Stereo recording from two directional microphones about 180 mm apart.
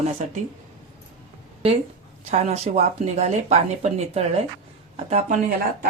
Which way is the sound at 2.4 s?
40° right (ahead or behind).